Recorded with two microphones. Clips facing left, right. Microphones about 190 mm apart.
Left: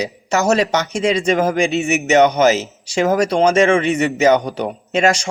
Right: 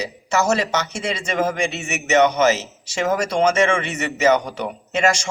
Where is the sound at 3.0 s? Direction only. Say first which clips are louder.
Left 4 dB; 35° left (ahead or behind).